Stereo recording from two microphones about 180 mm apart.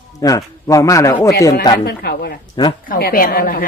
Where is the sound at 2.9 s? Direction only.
55° left (ahead or behind).